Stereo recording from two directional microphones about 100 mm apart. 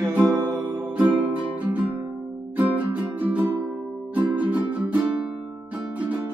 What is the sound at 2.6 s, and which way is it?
Music, 15° right (ahead or behind).